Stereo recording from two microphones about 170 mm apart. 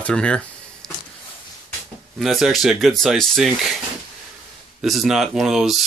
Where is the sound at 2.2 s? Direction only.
Centre (ahead or behind).